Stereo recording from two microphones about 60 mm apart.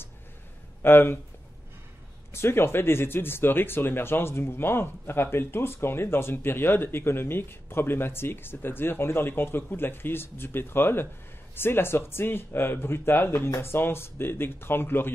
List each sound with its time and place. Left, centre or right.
0.8 s speech: left
2.3 s speech: left